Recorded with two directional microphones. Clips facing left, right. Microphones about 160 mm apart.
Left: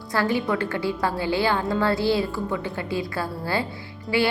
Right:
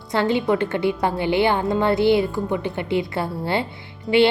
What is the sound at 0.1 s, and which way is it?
A woman's voice, 20° right (ahead or behind).